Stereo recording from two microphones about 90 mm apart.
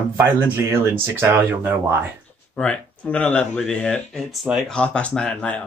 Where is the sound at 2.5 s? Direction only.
15° left (ahead or behind).